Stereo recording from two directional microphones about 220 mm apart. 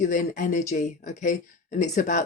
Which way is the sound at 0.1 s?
40° left (ahead or behind).